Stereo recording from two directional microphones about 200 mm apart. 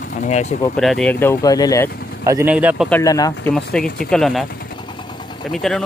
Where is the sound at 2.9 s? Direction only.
15° left (ahead or behind).